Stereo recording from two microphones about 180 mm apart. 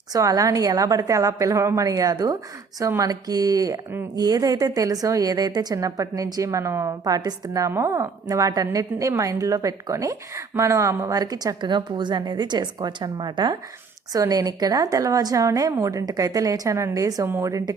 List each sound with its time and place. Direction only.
0.1 s a woman's voice: 20° right (ahead or behind)